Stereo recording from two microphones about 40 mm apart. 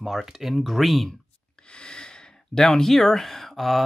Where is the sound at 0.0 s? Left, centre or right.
Centre.